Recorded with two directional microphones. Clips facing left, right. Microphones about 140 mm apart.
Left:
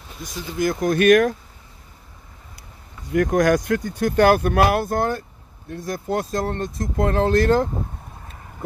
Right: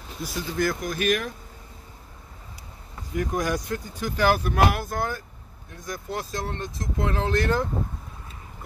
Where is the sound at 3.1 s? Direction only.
70° left (ahead or behind); by 7.7 s 35° left (ahead or behind).